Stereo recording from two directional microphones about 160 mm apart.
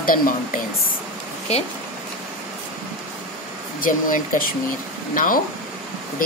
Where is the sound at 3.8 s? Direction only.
60° left (ahead or behind).